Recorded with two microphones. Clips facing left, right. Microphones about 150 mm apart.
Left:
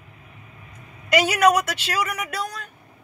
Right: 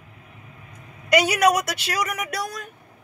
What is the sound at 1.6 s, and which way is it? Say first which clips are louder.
Speech: even; 40° right (ahead or behind).